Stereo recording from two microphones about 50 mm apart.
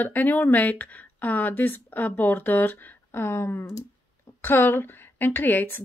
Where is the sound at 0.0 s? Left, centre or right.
Left.